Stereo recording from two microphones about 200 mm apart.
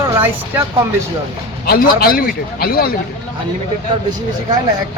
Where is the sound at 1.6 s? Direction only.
50° left (ahead or behind).